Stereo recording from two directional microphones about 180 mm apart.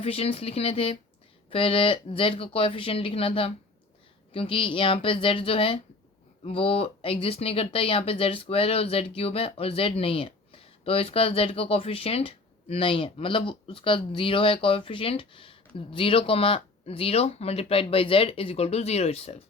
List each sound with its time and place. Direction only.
0.0 s speech: 35° left (ahead or behind)